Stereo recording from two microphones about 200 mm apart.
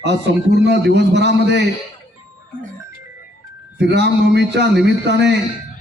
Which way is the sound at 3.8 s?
60° right (ahead or behind).